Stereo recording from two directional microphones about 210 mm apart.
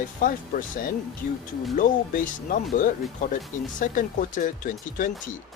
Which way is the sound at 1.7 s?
40° left (ahead or behind).